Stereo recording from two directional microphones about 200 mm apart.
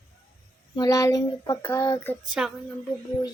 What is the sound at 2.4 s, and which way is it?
Speech, 5° right (ahead or behind).